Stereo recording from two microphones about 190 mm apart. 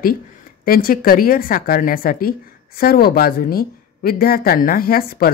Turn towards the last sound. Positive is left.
turn(degrees=50)  # may be behind; listen again after turning